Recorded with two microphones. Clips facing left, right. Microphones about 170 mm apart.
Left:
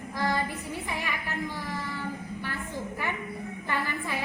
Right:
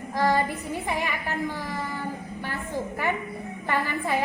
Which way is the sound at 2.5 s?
50° right (ahead or behind).